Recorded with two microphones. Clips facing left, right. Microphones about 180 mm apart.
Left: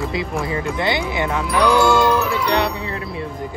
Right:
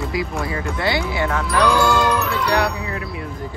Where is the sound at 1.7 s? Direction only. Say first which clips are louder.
Left 3 dB; centre (ahead or behind).